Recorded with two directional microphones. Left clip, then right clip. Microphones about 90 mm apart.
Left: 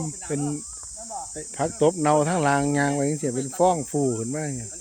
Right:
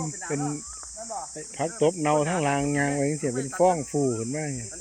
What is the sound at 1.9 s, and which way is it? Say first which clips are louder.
Speech: left 3 dB; 90° left.